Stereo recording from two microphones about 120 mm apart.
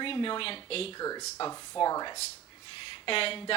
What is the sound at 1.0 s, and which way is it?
Speech, 35° left (ahead or behind).